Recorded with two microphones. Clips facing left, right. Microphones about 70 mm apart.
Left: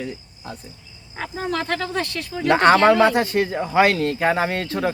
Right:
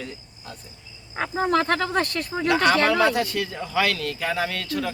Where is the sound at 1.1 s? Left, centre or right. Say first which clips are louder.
Right 4 dB; right.